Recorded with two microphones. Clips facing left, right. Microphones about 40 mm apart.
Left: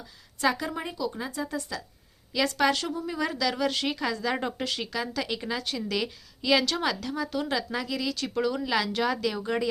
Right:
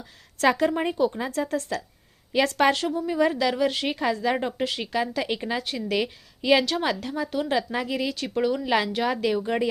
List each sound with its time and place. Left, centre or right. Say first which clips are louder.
0.0 s a sound: right 4 dB; right
0.8 s a woman's voice: right 8 dB; right
2.7 s speech: right 6 dB; right